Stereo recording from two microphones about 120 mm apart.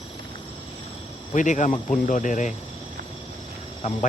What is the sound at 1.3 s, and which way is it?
Speech, 90° left.